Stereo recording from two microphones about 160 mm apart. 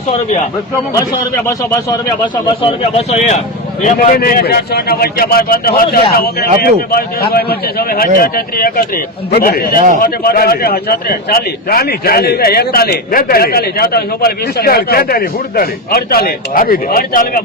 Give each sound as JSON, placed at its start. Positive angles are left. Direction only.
{"t": 0.9, "sound": "a man's voice", "side_deg": 20}
{"t": 2.6, "sound": "speech", "side_deg": 35}
{"t": 3.8, "sound": "a man's voice", "side_deg": 55}